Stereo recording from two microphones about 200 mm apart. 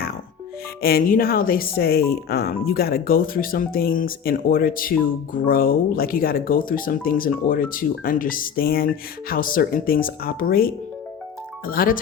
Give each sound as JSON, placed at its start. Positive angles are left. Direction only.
{"t": 0.8, "sound": "speech", "side_deg": 50}